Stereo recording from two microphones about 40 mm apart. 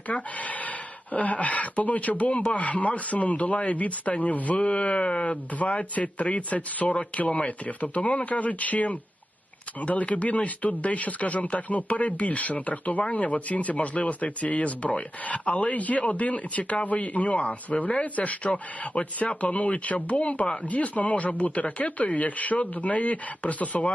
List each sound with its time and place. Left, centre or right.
0.1 s speech: left
20.7 s speech: left